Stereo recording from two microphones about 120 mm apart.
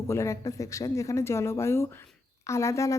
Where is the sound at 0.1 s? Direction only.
25° left (ahead or behind).